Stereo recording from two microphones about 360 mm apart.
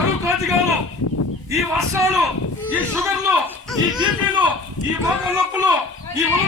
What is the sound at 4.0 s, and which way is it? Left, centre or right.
Speech, centre.